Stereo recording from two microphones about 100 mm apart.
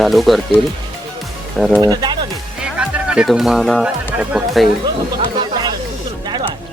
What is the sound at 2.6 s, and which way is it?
Music, 10° right (ahead or behind).